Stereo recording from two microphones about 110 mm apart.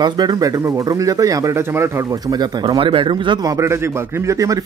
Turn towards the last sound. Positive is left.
turn(degrees=-30)  # may be behind; listen again after turning